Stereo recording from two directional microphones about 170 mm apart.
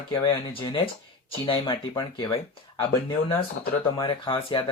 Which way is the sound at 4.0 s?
30° left (ahead or behind).